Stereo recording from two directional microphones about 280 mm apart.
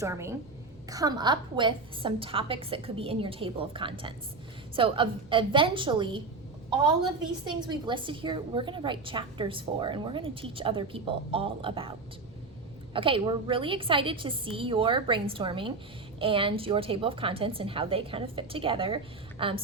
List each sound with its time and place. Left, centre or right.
0.0 s a woman's voice: centre
7.4 s a woman's voice: centre